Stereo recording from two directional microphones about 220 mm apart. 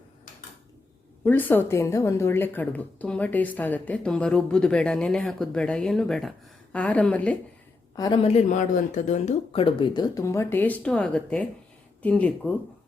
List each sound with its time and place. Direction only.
1.2 s a woman's voice: 10° left (ahead or behind)
7.9 s speech: 20° left (ahead or behind)